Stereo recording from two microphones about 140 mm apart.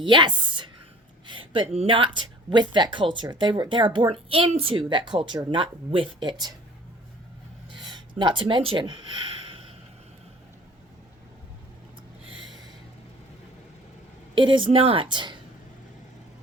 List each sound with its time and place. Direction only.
0.0 s a woman's voice: 35° right (ahead or behind)
7.7 s speech: 35° right (ahead or behind)
14.3 s speech: 35° right (ahead or behind)